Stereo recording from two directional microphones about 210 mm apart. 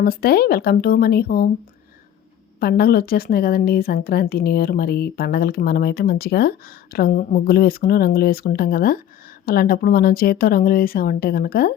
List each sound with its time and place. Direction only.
0.0 s a woman's voice: 45° left (ahead or behind)
2.6 s a woman's voice: 45° left (ahead or behind)